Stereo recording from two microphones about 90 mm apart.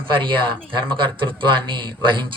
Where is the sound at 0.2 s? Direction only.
65° right (ahead or behind).